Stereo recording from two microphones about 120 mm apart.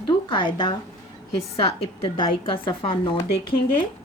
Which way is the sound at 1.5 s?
55° left (ahead or behind).